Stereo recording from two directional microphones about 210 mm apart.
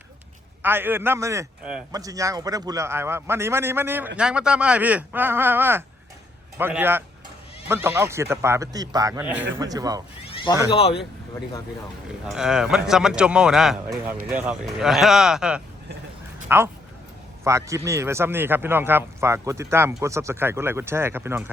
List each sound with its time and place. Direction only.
0.6 s speech: 10° right (ahead or behind)
10.2 s cat: 25° left (ahead or behind)
10.7 s speech: 25° left (ahead or behind)
12.3 s speech: centre (ahead or behind)